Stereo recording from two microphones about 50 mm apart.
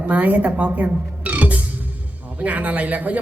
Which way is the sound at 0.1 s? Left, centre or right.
Right.